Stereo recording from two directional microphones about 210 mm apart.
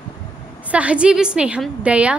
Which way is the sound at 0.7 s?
5° right (ahead or behind).